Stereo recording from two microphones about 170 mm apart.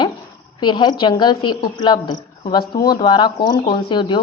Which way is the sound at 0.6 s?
25° left (ahead or behind).